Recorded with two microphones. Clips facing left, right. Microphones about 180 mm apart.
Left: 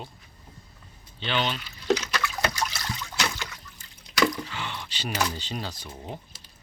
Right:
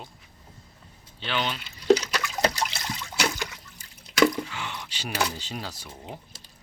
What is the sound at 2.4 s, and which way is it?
Water, 30° right (ahead or behind).